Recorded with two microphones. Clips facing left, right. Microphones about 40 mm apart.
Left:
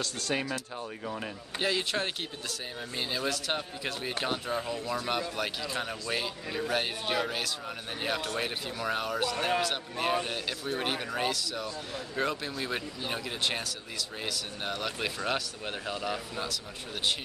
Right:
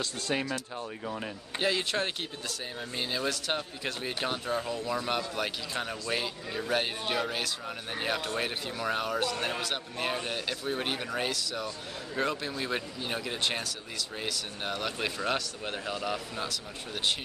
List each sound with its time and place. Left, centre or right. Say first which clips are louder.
0.0 s speech: even; centre